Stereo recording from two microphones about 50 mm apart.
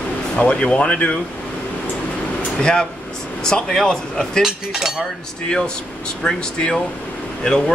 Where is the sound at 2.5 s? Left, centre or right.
Centre.